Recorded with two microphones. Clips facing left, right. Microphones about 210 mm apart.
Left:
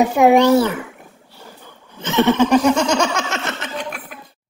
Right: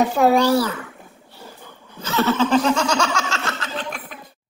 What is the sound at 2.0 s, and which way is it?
Laughter, 20° left (ahead or behind).